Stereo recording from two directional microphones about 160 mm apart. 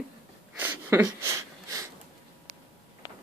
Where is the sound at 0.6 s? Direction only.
10° right (ahead or behind).